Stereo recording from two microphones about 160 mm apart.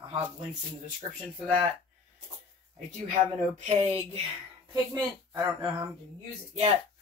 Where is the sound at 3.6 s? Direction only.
40° right (ahead or behind).